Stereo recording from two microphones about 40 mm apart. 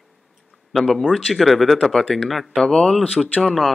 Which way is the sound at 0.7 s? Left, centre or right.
Centre.